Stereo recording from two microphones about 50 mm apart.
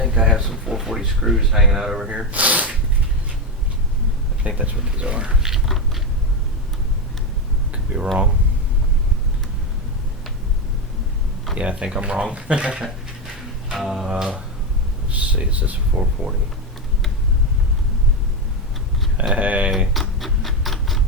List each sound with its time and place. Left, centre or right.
0.1 s speech: centre
2.0 s speech: right
4.4 s speech: right
4.9 s biting: centre
7.7 s a sound: right
11.5 s speech: right
13.7 s speech: centre
15.1 s speech: right
19.3 s speech: right
19.9 s a sound: centre